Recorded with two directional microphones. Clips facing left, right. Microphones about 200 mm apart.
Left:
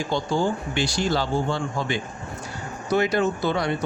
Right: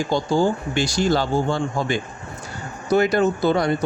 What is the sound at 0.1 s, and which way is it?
Speech, 40° right (ahead or behind).